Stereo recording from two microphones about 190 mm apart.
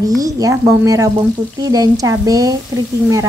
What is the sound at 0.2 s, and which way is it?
A woman's voice, 15° right (ahead or behind).